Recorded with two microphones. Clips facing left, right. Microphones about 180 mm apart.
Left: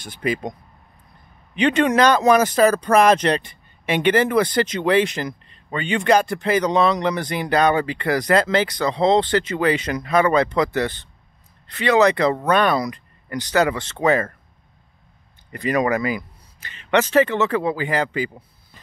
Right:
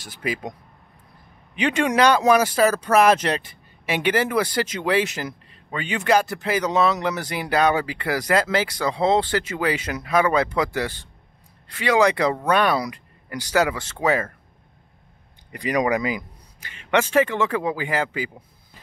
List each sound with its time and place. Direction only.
0.0 s speech: 5° right (ahead or behind)
15.5 s speech: 15° right (ahead or behind)